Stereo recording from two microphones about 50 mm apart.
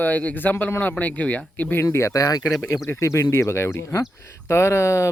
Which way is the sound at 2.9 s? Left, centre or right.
Left.